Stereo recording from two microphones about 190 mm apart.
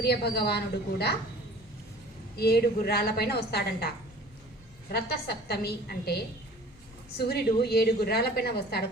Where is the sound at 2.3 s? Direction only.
55° left (ahead or behind).